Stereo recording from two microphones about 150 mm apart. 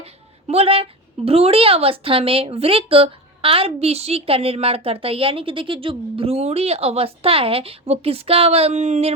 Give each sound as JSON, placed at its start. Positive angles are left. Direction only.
{"t": 0.0, "sound": "a woman's voice", "side_deg": -40}